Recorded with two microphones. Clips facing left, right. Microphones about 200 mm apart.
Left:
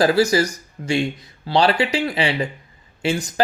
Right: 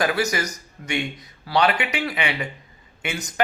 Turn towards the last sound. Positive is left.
turn(degrees=30)  # may be behind; listen again after turning